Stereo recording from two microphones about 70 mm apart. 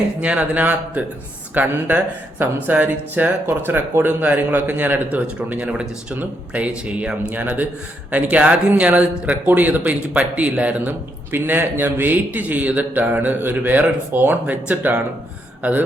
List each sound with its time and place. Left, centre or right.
0.2 s speech: centre